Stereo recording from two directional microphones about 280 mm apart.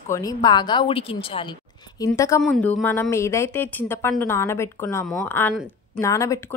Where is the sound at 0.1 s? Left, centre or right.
Centre.